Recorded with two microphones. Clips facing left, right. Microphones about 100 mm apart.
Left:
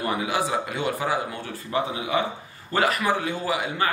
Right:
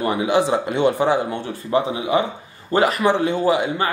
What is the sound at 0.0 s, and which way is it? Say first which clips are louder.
Speech: right 7 dB; 25° right (ahead or behind).